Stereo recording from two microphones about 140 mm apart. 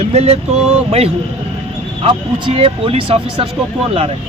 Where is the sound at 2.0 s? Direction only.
40° right (ahead or behind).